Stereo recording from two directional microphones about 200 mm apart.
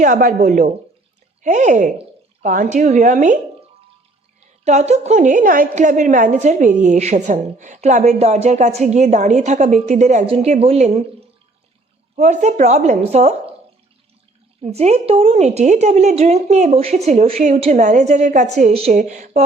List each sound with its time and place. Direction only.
0.0 s speech: 40° right (ahead or behind)
4.6 s speech: 35° right (ahead or behind)
12.1 s speech: 35° right (ahead or behind)
14.6 s speech: 35° right (ahead or behind)